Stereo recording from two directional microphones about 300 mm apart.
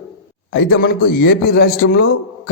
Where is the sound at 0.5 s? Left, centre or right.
Left.